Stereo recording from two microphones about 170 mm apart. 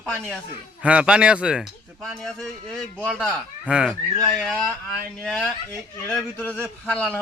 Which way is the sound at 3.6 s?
5° right (ahead or behind).